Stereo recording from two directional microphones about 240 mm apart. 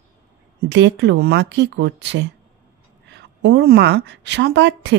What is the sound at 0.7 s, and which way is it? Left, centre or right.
A woman's voice, right.